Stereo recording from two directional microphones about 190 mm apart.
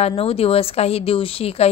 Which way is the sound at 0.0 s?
30° left (ahead or behind).